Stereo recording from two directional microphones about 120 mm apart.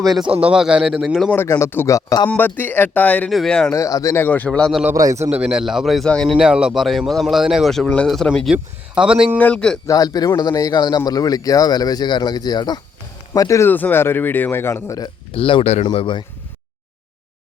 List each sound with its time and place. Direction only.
0.4 s speech: 5° right (ahead or behind)
1.5 s a man's voice: 25° left (ahead or behind)
2.3 s speech: 15° left (ahead or behind)
3.2 s speech: centre (ahead or behind)
3.7 s a man's voice: 25° left (ahead or behind); by 4.7 s 10° left (ahead or behind)
4.7 s speech: 10° right (ahead or behind)
4.9 s a man's voice: 25° right (ahead or behind)
5.3 s speech: 10° right (ahead or behind)
6.3 s speech: 5° right (ahead or behind)
8.5 s speech: 10° right (ahead or behind)
9.4 s speech: 10° left (ahead or behind)
9.8 s a man's voice: 30° left (ahead or behind)
15.3 s speech: 50° left (ahead or behind)